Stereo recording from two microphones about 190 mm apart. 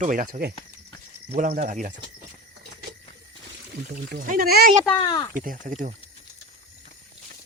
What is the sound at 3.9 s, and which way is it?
Speech, 50° right (ahead or behind).